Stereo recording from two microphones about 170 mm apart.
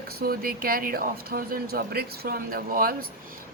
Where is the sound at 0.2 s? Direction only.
60° right (ahead or behind).